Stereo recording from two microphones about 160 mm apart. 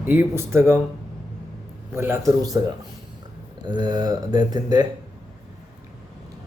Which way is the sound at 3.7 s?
25° right (ahead or behind).